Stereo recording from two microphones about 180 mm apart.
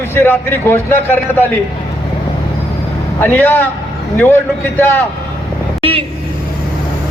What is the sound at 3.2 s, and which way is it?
A man's voice, 10° left (ahead or behind).